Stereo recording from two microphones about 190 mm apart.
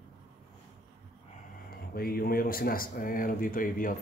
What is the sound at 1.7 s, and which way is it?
Speech, 50° left (ahead or behind).